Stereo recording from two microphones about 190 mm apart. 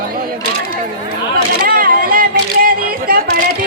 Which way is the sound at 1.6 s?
50° right (ahead or behind).